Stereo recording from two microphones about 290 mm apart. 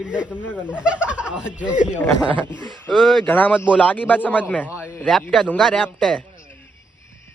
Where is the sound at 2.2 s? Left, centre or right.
Centre.